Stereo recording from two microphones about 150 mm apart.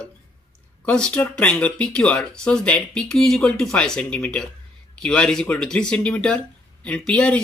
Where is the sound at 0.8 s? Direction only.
5° left (ahead or behind).